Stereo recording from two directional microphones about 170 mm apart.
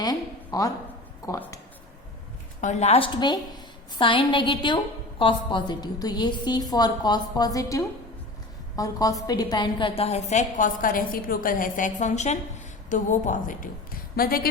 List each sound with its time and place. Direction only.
0.0 s a woman's voice: 20° left (ahead or behind)
2.6 s a woman's voice: 45° left (ahead or behind)
14.2 s speech: 60° left (ahead or behind)